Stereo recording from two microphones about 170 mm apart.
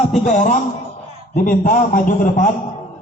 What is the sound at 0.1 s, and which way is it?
A man's voice, 45° left (ahead or behind).